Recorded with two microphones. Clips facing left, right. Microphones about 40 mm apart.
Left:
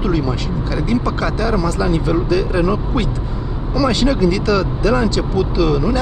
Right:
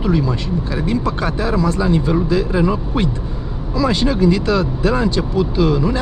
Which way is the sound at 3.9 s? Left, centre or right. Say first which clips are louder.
Right 1 dB; centre.